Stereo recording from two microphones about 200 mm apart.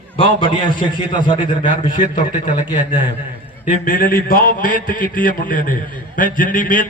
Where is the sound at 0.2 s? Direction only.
25° left (ahead or behind).